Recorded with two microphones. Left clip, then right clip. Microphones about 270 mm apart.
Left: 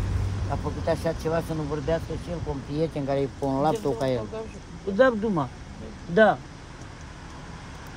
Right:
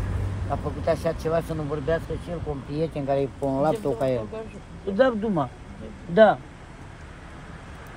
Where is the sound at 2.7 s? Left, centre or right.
Centre.